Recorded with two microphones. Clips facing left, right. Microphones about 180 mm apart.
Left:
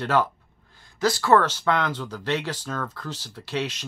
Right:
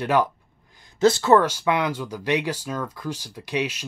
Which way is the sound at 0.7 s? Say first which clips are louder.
Right 6 dB; 25° right (ahead or behind).